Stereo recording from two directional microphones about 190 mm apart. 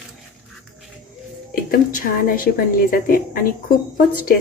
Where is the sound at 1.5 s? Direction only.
50° left (ahead or behind).